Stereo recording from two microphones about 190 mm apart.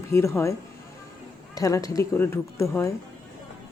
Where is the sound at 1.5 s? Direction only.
15° left (ahead or behind).